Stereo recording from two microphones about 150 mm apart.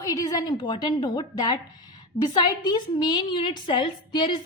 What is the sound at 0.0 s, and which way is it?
A woman's voice, 25° left (ahead or behind).